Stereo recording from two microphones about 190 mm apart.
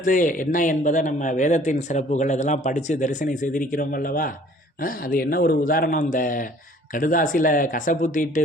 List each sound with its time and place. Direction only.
0.0 s speech: 45° left (ahead or behind)